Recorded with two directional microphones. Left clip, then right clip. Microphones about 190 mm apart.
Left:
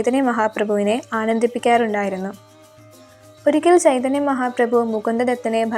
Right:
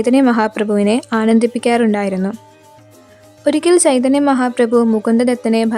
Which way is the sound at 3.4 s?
35° right (ahead or behind).